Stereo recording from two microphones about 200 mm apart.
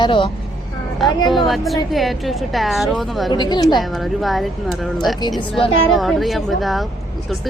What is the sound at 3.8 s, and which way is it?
A woman's voice, centre (ahead or behind).